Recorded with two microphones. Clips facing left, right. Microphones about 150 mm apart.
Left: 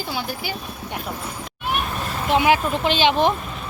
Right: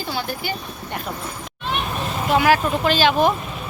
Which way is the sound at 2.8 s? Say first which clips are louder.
Right 1 dB; 20° left (ahead or behind).